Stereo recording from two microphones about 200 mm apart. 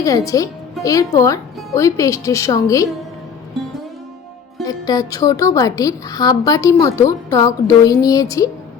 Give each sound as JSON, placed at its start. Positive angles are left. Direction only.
{"t": 0.0, "sound": "speech", "side_deg": 15}
{"t": 4.6, "sound": "speech", "side_deg": 20}